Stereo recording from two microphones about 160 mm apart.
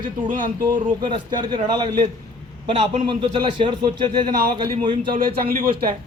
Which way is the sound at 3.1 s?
30° right (ahead or behind).